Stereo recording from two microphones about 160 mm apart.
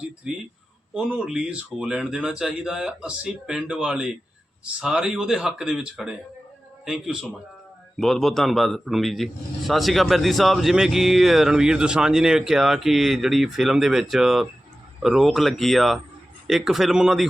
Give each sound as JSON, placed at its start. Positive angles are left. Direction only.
{"t": 0.3, "sound": "a man's voice", "side_deg": -5}